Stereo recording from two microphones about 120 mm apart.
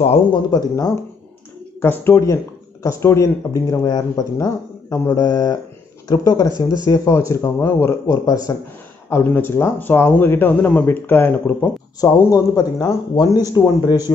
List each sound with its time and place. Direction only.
0.3 s speech: 35° left (ahead or behind)
1.8 s speech: 20° left (ahead or behind)
9.1 s speech: 15° left (ahead or behind)
12.0 s speech: 30° left (ahead or behind)